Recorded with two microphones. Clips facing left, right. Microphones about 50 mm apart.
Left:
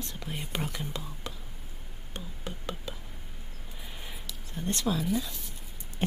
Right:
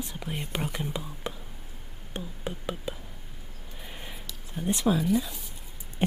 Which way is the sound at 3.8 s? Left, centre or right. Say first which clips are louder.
Right 2 dB; centre.